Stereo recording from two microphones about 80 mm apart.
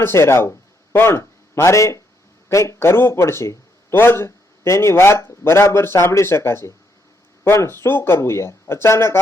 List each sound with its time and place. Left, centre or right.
0.0 s a man's voice: left